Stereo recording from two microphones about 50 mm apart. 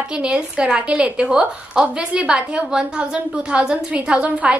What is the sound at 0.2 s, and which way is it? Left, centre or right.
A woman's voice, centre.